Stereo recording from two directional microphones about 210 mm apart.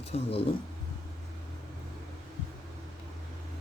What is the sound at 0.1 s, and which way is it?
Speech, 25° left (ahead or behind).